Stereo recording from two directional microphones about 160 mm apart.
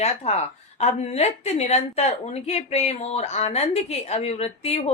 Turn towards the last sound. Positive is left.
turn(degrees=40)  # may be behind; listen again after turning